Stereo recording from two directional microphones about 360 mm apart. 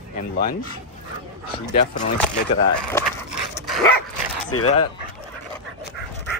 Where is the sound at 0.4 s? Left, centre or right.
Left.